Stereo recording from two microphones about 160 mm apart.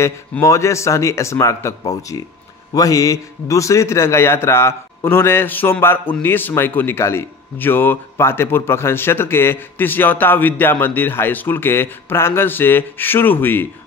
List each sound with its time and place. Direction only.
0.0 s speech: 20° left (ahead or behind)